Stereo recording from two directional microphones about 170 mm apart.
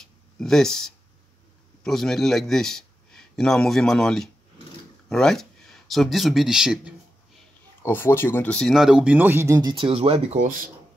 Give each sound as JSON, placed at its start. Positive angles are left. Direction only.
{"t": 0.4, "sound": "a man's voice", "side_deg": 5}
{"t": 7.8, "sound": "speech", "side_deg": 15}
{"t": 10.4, "sound": "speech", "side_deg": -55}